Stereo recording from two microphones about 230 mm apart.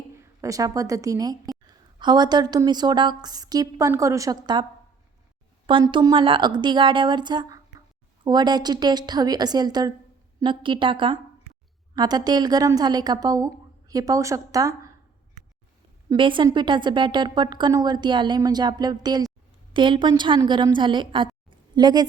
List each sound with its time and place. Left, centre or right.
0.1 s a woman's voice: centre
5.6 s a woman's voice: right
16.0 s a woman's voice: right